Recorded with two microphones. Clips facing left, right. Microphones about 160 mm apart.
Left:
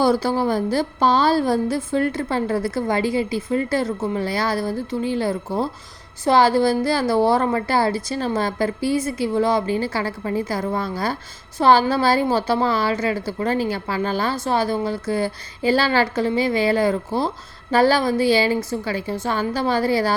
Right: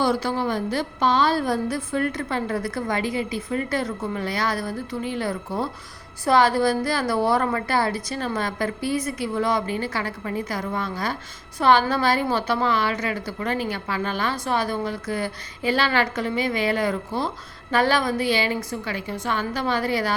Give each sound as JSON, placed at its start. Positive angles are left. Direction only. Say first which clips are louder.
{"t": 0.0, "sound": "a woman's voice", "louder": "left 4 dB", "side_deg": 35}